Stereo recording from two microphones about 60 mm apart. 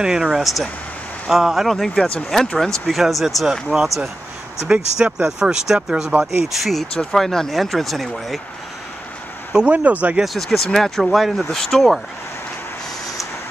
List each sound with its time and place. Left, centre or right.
0.0 s speech: centre
2.9 s speech: centre
6.0 s speech: right
6.4 s speech: centre
9.7 s speech: right
10.2 s speech: centre